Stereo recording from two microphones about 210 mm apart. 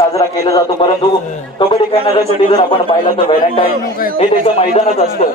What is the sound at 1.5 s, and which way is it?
A man's voice, 25° left (ahead or behind).